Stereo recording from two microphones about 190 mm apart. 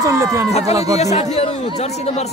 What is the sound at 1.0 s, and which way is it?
Speech, 35° left (ahead or behind).